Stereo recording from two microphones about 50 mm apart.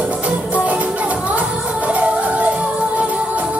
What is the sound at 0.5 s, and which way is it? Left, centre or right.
Music, right.